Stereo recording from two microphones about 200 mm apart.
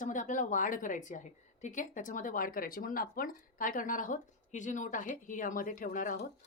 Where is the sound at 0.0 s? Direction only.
40° left (ahead or behind).